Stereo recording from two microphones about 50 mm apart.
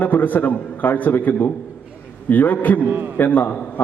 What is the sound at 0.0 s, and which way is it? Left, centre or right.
A man's voice, left.